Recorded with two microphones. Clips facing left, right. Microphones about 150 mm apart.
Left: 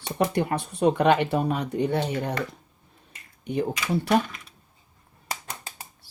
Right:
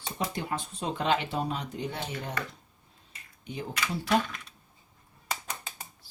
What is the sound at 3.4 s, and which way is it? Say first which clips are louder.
Speech: left 11 dB; 60° left (ahead or behind).